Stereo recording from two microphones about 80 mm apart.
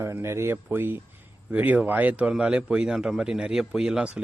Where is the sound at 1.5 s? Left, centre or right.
Centre.